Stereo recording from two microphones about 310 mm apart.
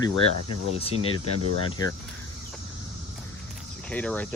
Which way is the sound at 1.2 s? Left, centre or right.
Left.